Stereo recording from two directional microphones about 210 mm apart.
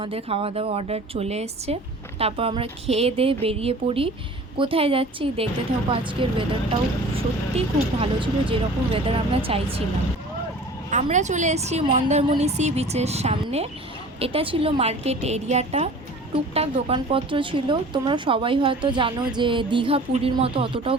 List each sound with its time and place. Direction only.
0.0 s speech: 25° right (ahead or behind)
7.5 s speech: 25° right (ahead or behind)
10.9 s a woman's voice: 35° right (ahead or behind)